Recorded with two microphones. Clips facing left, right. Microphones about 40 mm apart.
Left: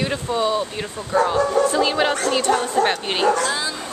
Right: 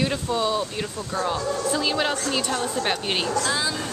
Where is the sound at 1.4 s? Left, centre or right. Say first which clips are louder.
Left 8 dB; left.